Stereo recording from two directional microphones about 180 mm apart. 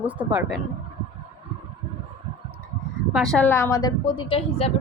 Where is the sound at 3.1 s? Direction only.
Centre (ahead or behind).